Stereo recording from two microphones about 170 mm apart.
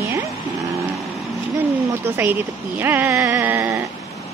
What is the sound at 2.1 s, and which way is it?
Speech, 10° right (ahead or behind).